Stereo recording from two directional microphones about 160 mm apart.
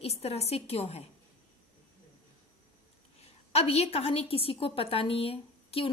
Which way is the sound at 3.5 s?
40° left (ahead or behind).